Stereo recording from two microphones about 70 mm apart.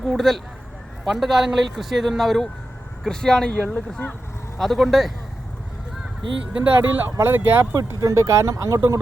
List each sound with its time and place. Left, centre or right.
0.0 s a man's voice: centre
4.5 s a man's voice: centre
6.6 s speech: right
8.0 s speech: right